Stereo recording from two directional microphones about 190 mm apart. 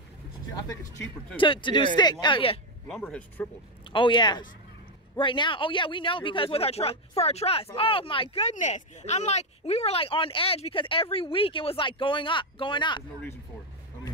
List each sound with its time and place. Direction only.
1.3 s speech: 25° left (ahead or behind)
2.9 s speech: 5° left (ahead or behind)
3.9 s speech: 25° left (ahead or behind)